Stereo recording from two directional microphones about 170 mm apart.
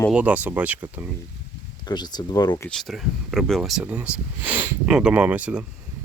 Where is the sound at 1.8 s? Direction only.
25° left (ahead or behind).